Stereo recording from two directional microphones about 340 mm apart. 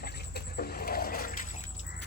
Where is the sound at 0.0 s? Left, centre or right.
Left.